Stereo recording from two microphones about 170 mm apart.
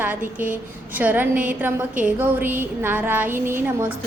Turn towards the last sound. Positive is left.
turn(degrees=-10)  # may be behind; listen again after turning